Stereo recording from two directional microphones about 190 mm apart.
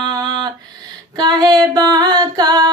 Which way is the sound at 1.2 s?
20° right (ahead or behind).